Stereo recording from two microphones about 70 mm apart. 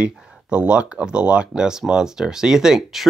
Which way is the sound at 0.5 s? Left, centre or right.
Centre.